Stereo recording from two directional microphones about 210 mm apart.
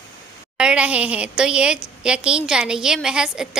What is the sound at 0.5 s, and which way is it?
A woman's voice, 5° right (ahead or behind).